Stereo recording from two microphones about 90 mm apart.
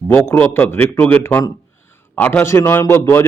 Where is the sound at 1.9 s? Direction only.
20° left (ahead or behind).